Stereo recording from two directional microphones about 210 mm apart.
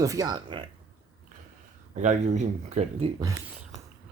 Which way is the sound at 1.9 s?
35° right (ahead or behind).